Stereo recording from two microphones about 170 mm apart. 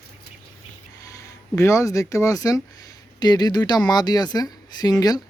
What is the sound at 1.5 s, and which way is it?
Speech, 15° left (ahead or behind).